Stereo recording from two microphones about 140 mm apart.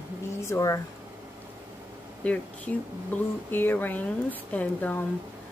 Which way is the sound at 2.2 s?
10° left (ahead or behind).